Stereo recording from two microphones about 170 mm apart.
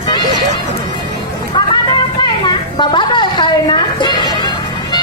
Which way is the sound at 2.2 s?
25° left (ahead or behind).